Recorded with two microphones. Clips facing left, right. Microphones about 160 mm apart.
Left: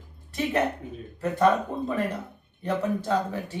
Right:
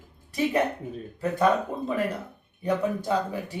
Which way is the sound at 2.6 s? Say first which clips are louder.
Right 1 dB; 10° right (ahead or behind).